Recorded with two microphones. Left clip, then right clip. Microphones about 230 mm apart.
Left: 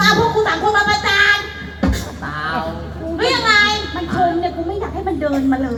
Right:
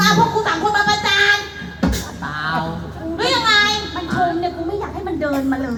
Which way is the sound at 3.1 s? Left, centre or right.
Right.